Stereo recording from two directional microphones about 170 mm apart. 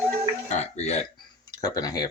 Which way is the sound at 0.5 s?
40° left (ahead or behind).